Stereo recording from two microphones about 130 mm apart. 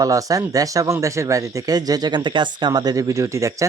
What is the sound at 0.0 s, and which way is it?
Speech, 25° right (ahead or behind).